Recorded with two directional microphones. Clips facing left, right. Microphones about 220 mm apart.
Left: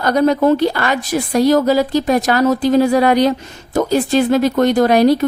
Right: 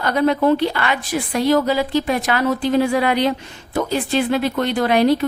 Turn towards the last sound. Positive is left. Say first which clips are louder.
# left 4 dB
turn(degrees=40)  # may be behind; listen again after turning